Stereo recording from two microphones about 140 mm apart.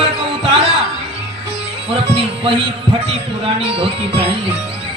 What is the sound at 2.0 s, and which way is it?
Music, 45° right (ahead or behind).